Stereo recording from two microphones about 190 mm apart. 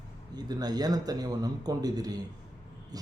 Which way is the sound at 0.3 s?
20° right (ahead or behind).